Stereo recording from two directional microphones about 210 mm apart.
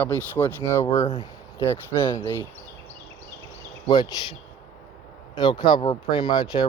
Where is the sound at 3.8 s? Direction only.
25° left (ahead or behind).